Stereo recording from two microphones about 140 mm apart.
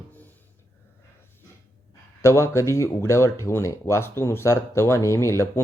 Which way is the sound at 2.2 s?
20° left (ahead or behind).